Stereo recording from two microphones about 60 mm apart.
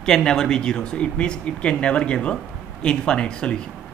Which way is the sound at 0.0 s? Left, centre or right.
Centre.